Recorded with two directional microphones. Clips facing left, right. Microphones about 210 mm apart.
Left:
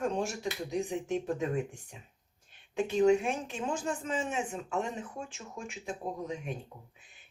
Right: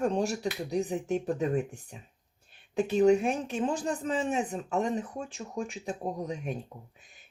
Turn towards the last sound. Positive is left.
turn(degrees=-40)  # may be behind; listen again after turning